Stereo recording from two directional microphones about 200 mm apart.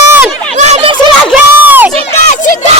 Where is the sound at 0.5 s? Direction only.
35° right (ahead or behind).